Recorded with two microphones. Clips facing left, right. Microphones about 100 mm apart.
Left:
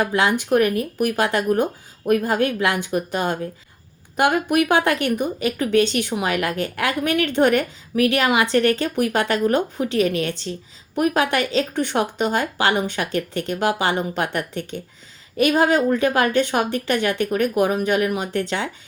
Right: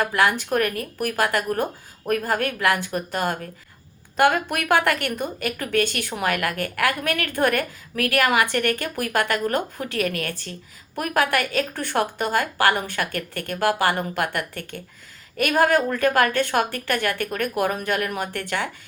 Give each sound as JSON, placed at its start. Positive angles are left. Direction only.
{"t": 0.0, "sound": "speech", "side_deg": 20}